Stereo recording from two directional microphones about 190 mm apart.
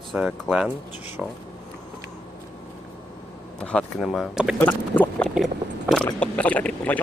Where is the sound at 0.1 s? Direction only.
5° right (ahead or behind).